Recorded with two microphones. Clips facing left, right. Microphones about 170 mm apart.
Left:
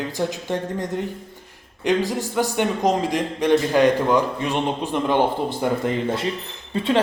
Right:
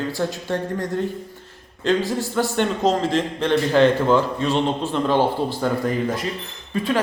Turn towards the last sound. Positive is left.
turn(degrees=25)  # may be behind; listen again after turning